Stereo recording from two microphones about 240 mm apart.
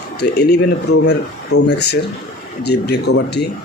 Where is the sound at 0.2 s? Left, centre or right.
Left.